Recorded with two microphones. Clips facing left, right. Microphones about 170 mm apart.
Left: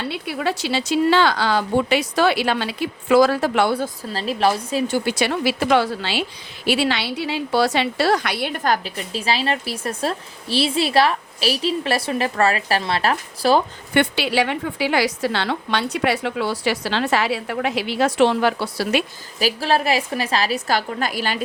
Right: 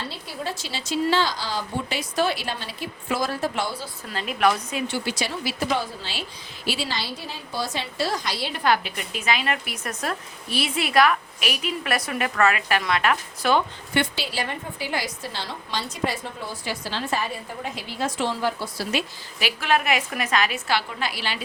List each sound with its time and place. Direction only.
0.0 s a woman's voice: 65° left (ahead or behind)
4.1 s a woman's voice: 35° left (ahead or behind)
13.9 s a woman's voice: 65° left (ahead or behind)
19.4 s a woman's voice: 35° left (ahead or behind)